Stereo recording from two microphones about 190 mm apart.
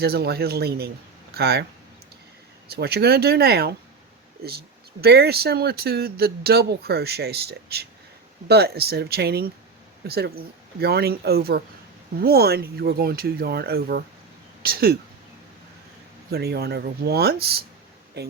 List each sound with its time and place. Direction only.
0.0 s speech: 55° right (ahead or behind)
2.6 s speech: 55° right (ahead or behind)
16.3 s speech: 55° right (ahead or behind)